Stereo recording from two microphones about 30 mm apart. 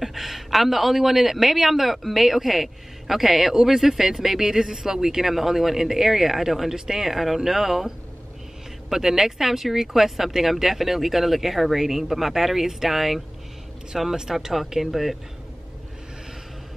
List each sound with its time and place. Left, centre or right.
0.0 s speech: centre